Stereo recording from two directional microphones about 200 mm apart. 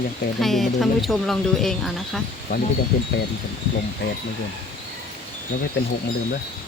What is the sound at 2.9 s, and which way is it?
Speech, 45° left (ahead or behind).